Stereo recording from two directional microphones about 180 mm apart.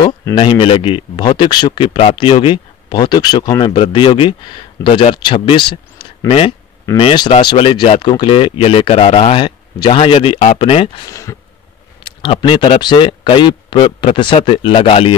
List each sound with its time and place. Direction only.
0.0 s speech: 25° left (ahead or behind)
11.1 s speech: 15° left (ahead or behind)
12.0 s speech: 30° left (ahead or behind)